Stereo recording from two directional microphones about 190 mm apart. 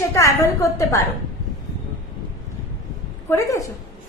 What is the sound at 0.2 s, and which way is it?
Speech, 15° left (ahead or behind).